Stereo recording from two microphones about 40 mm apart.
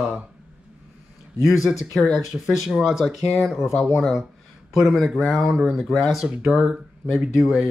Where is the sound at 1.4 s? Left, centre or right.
Centre.